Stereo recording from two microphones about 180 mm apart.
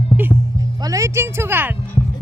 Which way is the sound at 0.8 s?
20° right (ahead or behind).